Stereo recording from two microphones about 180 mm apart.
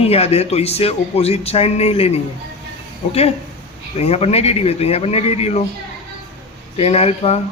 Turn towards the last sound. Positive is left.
turn(degrees=35)  # may be behind; listen again after turning